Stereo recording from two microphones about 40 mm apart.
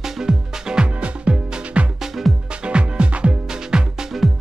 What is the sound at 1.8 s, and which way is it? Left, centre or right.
Music, centre.